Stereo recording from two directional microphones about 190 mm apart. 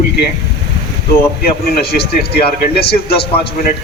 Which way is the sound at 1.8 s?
55° left (ahead or behind).